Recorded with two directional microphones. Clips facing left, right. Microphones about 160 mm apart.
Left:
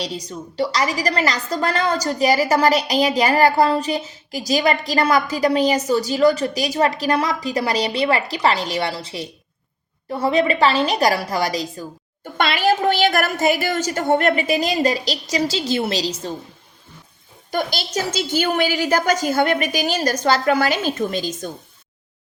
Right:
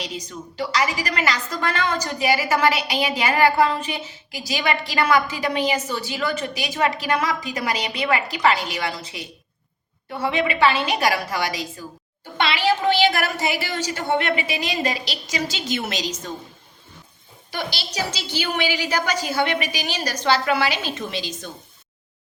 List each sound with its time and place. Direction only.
0.0 s a woman's voice: 35° left (ahead or behind)
17.5 s a woman's voice: 45° left (ahead or behind)